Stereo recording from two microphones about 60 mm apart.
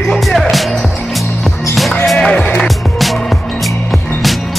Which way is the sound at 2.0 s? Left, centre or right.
Centre.